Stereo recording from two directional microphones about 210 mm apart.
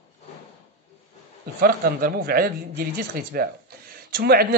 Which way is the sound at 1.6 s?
45° right (ahead or behind).